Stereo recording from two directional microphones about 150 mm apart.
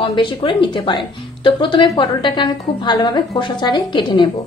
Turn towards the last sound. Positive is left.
turn(degrees=30)  # may be behind; listen again after turning